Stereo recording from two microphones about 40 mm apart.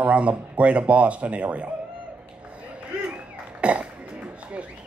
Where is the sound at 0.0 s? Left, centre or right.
Right.